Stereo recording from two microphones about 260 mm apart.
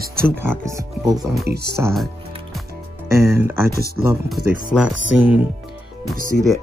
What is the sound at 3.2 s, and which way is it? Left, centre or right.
Speech, centre.